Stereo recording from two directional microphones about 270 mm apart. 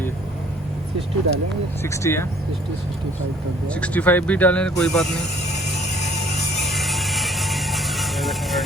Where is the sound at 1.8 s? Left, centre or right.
Centre.